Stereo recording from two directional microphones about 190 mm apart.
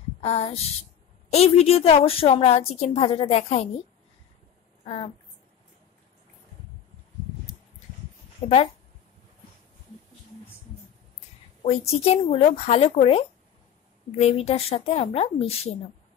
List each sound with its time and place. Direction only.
0.2 s a woman's voice: 30° left (ahead or behind)
8.4 s speech: 25° left (ahead or behind)
12.0 s a woman's voice: 30° left (ahead or behind)